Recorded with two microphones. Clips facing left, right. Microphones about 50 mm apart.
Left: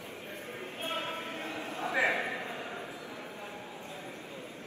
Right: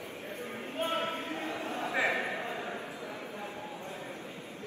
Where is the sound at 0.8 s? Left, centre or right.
Right.